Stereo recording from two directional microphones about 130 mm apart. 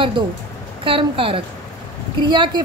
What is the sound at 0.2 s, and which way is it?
A woman's voice, 40° right (ahead or behind).